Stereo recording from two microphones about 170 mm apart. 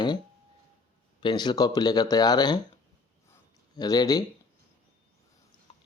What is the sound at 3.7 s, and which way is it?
Speech, 25° left (ahead or behind).